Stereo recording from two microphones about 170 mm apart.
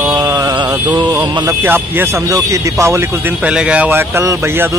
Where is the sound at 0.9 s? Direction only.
25° right (ahead or behind).